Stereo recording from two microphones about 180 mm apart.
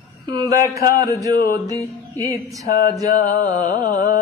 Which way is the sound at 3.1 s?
55° left (ahead or behind).